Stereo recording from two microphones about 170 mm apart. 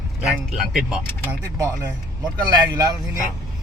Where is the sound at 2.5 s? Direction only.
25° right (ahead or behind).